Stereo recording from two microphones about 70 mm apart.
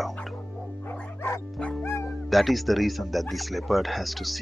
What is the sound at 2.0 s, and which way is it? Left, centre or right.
Speech, centre.